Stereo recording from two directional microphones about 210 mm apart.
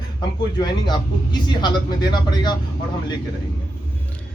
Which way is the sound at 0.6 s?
20° left (ahead or behind).